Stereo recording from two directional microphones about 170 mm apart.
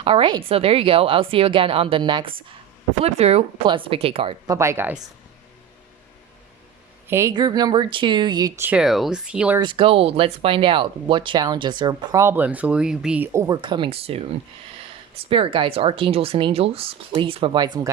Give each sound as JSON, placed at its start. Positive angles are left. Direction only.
{"t": 0.0, "sound": "speech", "side_deg": -30}
{"t": 3.0, "sound": "speech", "side_deg": -40}
{"t": 4.4, "sound": "speech", "side_deg": -15}
{"t": 7.1, "sound": "speech", "side_deg": -15}
{"t": 9.6, "sound": "speech", "side_deg": -30}
{"t": 13.6, "sound": "speech", "side_deg": -30}